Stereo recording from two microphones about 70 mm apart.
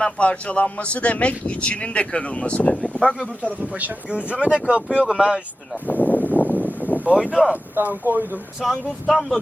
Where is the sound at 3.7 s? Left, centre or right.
Centre.